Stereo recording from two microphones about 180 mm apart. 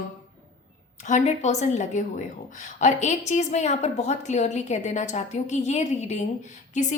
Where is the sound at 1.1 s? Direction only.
40° left (ahead or behind).